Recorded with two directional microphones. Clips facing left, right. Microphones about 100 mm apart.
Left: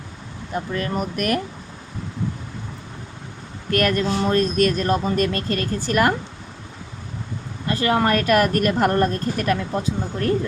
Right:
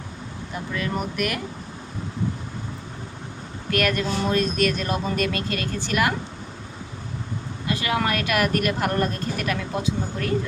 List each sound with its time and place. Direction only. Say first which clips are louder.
0.5 s speech: left 3 dB; 45° left (ahead or behind)
3.7 s a woman's voice: left 3 dB; 40° left (ahead or behind)
7.7 s a woman's voice: left 5 dB; 40° left (ahead or behind)